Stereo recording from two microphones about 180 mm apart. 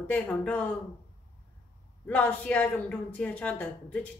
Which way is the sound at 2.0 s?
10° left (ahead or behind).